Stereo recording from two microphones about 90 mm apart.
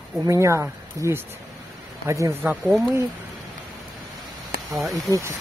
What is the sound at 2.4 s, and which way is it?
Speech, 15° right (ahead or behind).